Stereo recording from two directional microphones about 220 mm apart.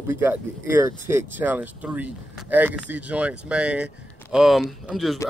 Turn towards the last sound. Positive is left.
turn(degrees=0)  # may be behind; listen again after turning